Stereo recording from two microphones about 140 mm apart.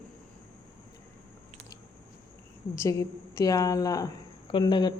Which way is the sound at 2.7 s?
20° left (ahead or behind).